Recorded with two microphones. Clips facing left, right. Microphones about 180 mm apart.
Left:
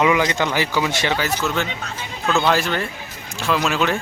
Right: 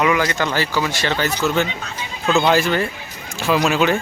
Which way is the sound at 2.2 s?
15° right (ahead or behind).